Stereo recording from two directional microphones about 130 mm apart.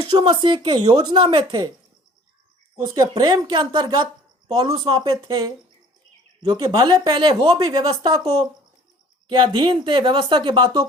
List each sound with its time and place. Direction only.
0.3 s speech: 40° right (ahead or behind)
2.8 s speech: 30° right (ahead or behind)
9.3 s speech: 35° right (ahead or behind)